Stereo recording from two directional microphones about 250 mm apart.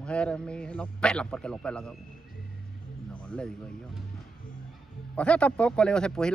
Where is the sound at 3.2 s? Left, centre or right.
Centre.